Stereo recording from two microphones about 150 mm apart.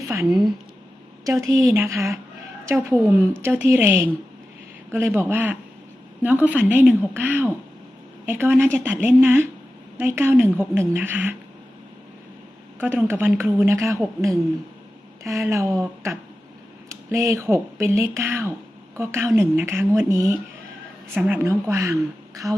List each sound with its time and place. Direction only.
0.1 s a woman's voice: 20° right (ahead or behind)
12.8 s a woman's voice: 15° right (ahead or behind)
15.2 s speech: 20° right (ahead or behind)
16.9 s a woman's voice: 20° right (ahead or behind)